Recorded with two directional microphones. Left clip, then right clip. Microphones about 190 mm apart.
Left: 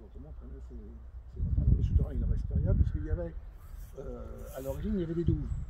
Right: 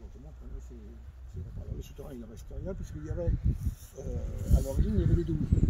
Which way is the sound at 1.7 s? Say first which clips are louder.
Left 3 dB; 60° right (ahead or behind).